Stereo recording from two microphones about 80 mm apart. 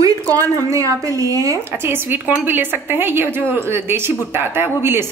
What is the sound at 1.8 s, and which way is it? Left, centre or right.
A woman's voice, right.